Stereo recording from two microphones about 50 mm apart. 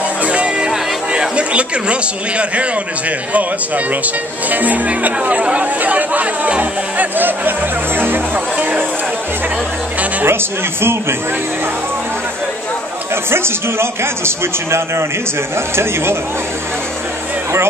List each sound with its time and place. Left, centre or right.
0.2 s music: right
0.7 s music: centre
1.3 s speech: right
10.2 s speech: right
13.1 s a man's voice: right